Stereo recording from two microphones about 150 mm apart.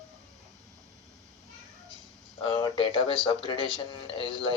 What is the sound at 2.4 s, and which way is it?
Speech, 35° left (ahead or behind).